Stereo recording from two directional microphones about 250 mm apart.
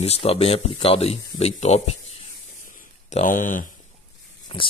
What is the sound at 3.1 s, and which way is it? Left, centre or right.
Speech, left.